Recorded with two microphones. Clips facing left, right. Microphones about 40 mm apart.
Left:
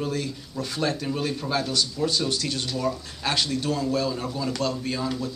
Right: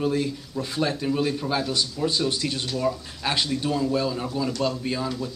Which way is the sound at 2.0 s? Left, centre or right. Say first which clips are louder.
Right 4 dB; centre.